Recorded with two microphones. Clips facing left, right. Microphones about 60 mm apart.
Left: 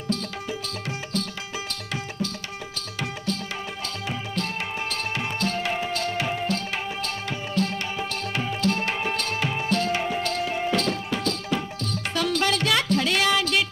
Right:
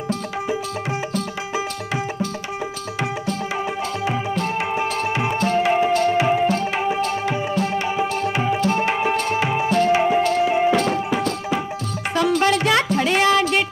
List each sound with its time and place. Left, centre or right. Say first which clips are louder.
4.0 s tabla: right 6 dB; centre
10.6 s music: right 7 dB; centre